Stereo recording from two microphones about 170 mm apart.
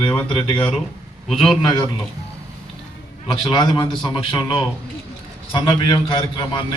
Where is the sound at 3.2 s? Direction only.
30° left (ahead or behind).